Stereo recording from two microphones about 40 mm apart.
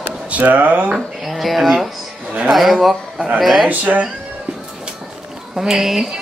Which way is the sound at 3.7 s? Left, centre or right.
Right.